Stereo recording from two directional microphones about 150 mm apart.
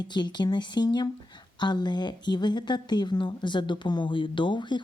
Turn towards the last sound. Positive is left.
turn(degrees=30)  # may be behind; listen again after turning